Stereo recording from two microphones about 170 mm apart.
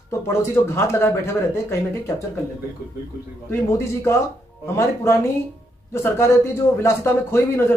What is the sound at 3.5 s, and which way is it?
Speech, 15° left (ahead or behind).